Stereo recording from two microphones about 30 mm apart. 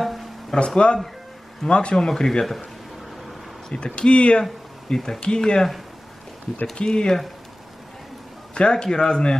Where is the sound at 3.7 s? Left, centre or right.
Left.